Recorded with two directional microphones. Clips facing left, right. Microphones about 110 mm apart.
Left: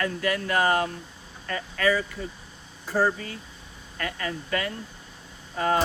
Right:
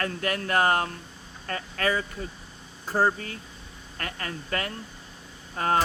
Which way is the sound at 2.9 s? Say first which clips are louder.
Even; 45° right (ahead or behind).